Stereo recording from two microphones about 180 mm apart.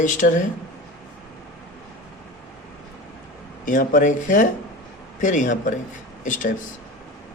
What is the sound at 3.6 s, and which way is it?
Speech, 50° left (ahead or behind).